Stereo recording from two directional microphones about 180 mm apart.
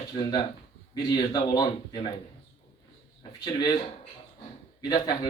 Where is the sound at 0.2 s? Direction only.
25° left (ahead or behind).